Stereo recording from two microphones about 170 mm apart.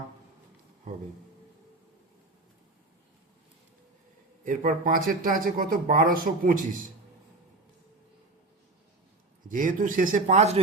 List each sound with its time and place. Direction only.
4.4 s speech: 55° right (ahead or behind)
9.5 s speech: 50° right (ahead or behind)